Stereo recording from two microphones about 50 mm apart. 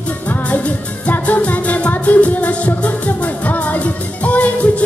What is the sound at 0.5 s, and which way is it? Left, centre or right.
Music, left.